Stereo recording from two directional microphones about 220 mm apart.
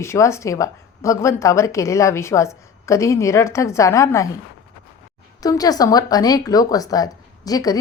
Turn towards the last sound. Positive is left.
turn(degrees=15)  # may be behind; listen again after turning